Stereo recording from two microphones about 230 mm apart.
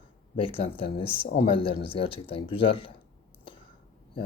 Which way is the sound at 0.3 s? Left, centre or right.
Left.